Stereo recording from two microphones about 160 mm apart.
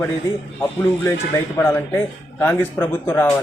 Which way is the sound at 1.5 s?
15° left (ahead or behind).